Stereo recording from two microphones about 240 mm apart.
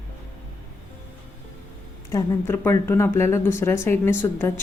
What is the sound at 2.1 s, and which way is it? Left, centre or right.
Speech, centre.